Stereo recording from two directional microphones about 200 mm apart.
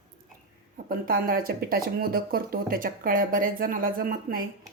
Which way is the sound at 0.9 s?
45° right (ahead or behind).